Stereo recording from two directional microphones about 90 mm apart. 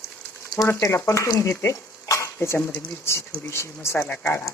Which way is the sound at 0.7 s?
30° left (ahead or behind).